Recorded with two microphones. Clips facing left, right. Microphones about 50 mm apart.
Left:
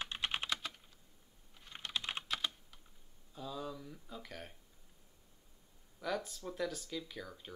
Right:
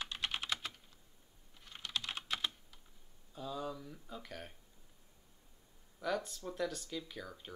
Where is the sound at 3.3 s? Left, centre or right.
Centre.